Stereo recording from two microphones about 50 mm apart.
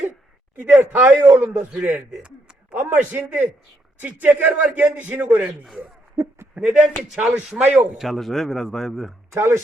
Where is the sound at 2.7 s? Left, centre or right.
Right.